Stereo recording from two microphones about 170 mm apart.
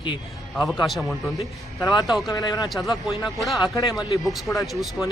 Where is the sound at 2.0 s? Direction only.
Centre (ahead or behind).